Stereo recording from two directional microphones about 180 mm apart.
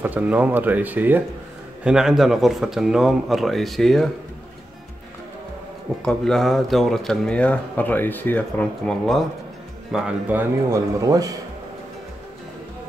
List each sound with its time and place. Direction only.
0.0 s speech: 10° right (ahead or behind)
6.0 s speech: centre (ahead or behind)
10.7 s speech: 20° right (ahead or behind)